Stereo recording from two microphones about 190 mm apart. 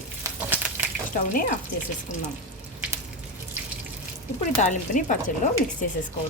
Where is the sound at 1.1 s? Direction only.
45° left (ahead or behind).